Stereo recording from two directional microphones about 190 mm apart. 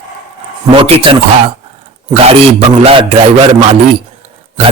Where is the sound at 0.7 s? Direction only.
30° right (ahead or behind).